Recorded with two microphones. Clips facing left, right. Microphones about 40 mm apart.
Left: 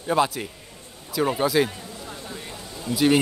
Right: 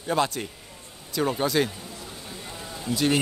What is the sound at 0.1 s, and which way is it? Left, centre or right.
Speech, centre.